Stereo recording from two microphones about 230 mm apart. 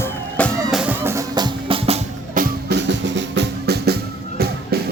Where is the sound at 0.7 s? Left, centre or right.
Centre; by 2.0 s right.